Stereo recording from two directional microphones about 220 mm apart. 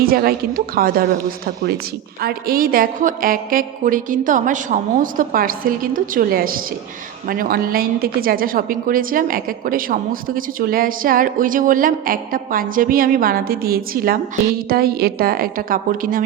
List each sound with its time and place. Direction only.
0.0 s a woman's voice: 40° right (ahead or behind)
2.2 s a woman's voice: 40° right (ahead or behind)